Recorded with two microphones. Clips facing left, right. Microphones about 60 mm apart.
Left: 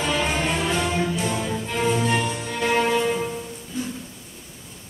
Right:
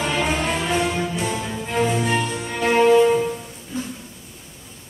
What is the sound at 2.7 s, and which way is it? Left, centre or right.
Music, right.